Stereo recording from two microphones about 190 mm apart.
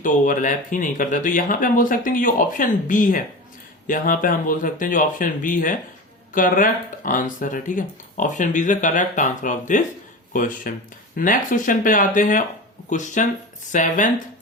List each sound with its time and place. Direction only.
0.0 s speech: 45° left (ahead or behind)